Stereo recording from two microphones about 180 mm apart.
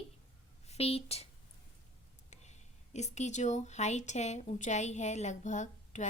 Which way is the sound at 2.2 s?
40° left (ahead or behind).